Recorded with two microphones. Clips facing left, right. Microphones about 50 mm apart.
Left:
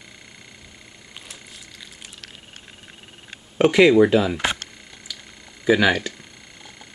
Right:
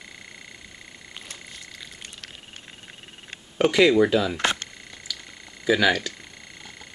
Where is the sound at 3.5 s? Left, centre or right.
Centre.